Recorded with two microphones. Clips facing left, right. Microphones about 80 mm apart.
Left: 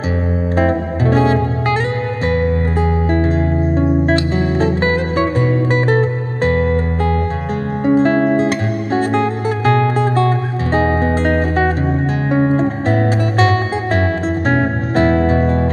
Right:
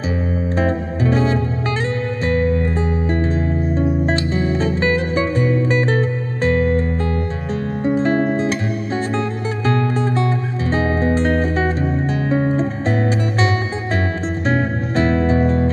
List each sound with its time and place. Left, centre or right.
0.6 s music: left
3.7 s music: left
7.8 s music: left